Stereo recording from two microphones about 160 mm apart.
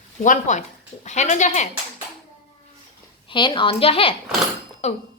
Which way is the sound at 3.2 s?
30° left (ahead or behind).